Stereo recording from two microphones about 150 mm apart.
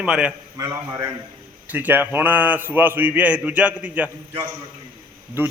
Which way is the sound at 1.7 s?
10° right (ahead or behind).